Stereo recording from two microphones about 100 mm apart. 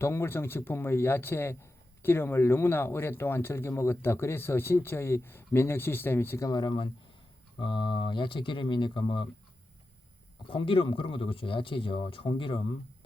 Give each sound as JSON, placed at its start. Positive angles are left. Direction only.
{"t": 0.0, "sound": "speech", "side_deg": 25}
{"t": 6.5, "sound": "speech", "side_deg": 50}
{"t": 10.5, "sound": "speech", "side_deg": 60}